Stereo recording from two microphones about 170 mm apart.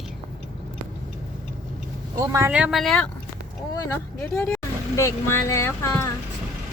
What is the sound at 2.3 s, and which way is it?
Speech, 20° right (ahead or behind).